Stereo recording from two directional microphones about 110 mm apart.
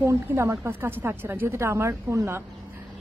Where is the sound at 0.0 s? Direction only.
25° right (ahead or behind).